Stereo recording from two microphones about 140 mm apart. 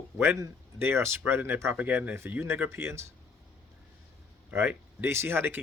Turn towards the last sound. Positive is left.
turn(degrees=-15)  # may be behind; listen again after turning